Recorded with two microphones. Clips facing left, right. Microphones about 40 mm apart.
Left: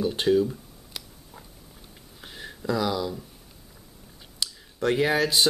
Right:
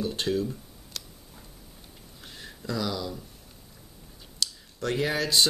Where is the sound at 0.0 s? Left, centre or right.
Centre.